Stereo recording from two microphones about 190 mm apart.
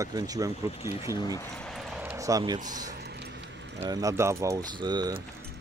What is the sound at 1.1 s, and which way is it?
Speech, 20° left (ahead or behind).